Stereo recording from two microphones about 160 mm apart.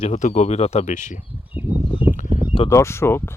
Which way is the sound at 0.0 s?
45° left (ahead or behind).